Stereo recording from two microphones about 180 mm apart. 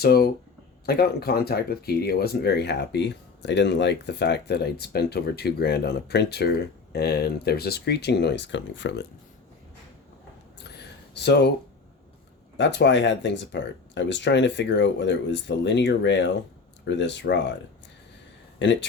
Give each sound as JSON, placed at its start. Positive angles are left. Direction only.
{"t": 0.0, "sound": "speech", "side_deg": 60}
{"t": 11.1, "sound": "speech", "side_deg": 70}
{"t": 12.5, "sound": "speech", "side_deg": 75}
{"t": 18.6, "sound": "speech", "side_deg": 80}